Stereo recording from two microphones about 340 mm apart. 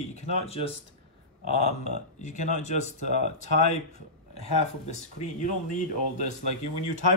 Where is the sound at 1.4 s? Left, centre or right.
Left.